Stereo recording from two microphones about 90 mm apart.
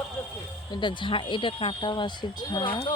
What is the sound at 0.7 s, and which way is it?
Speech, 60° left (ahead or behind).